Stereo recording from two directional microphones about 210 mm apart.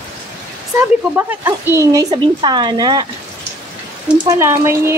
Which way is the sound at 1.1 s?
10° right (ahead or behind).